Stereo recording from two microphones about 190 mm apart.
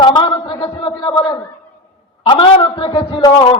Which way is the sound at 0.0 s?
25° left (ahead or behind).